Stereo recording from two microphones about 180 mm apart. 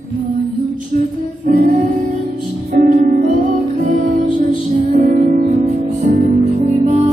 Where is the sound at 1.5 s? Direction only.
50° right (ahead or behind).